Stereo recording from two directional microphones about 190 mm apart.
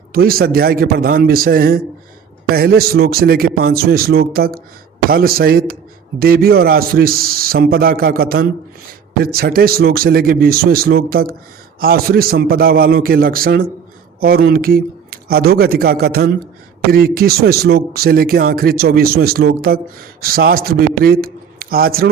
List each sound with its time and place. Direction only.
0.1 s speech: 50° right (ahead or behind)